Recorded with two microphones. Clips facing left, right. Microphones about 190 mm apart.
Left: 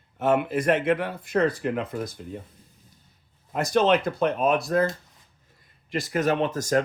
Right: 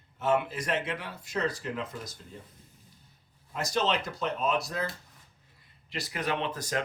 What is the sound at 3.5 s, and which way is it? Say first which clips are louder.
Speech: left 8 dB; 55° left (ahead or behind).